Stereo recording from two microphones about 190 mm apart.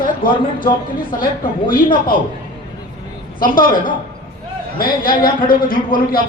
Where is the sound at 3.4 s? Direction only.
45° left (ahead or behind).